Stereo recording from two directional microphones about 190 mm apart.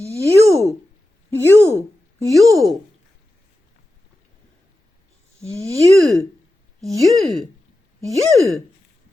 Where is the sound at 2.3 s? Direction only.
Centre (ahead or behind).